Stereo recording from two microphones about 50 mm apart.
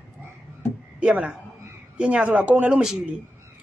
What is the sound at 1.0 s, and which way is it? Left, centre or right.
A man's voice, right.